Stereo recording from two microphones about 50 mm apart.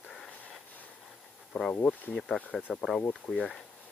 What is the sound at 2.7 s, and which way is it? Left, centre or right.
Speech, centre.